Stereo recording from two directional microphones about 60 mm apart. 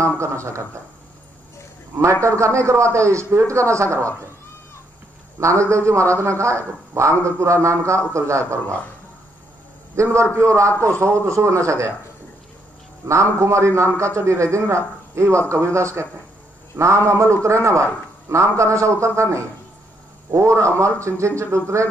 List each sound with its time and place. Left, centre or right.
0.2 s a man's voice: right
2.2 s a man's voice: right
5.4 s a man's voice: right
9.9 s a man's voice: right
13.0 s a man's voice: right